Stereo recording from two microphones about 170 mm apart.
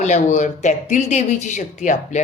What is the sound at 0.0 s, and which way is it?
A woman's voice, 45° left (ahead or behind).